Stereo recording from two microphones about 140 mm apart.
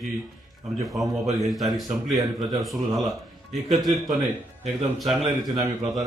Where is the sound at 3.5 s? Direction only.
Centre (ahead or behind).